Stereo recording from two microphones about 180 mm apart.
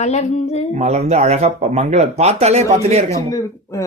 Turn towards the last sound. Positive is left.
turn(degrees=20)  # may be behind; listen again after turning